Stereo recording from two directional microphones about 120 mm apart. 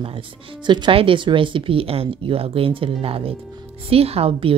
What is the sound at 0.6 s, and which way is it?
A woman's voice, 40° right (ahead or behind).